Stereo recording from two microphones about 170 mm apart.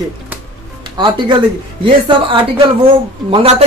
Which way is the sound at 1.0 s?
30° right (ahead or behind).